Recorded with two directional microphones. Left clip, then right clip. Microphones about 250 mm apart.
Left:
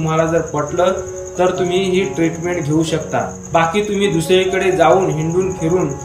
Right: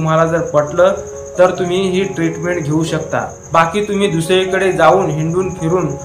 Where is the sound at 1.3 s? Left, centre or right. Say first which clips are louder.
Right 3 dB; centre.